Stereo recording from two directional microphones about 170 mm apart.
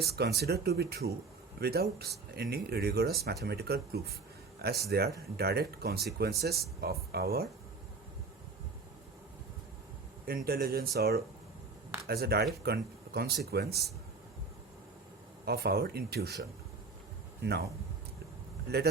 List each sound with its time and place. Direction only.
0.0 s speech: 70° right (ahead or behind)
10.2 s speech: 60° right (ahead or behind)
15.4 s speech: 65° right (ahead or behind)